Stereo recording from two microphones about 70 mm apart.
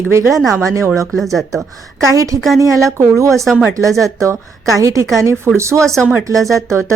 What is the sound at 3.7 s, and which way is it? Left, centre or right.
A woman's voice, right.